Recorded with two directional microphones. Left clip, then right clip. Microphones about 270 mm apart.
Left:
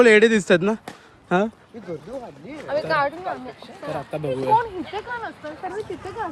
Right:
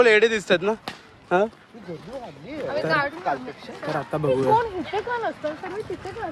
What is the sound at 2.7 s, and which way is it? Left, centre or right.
Speech, left.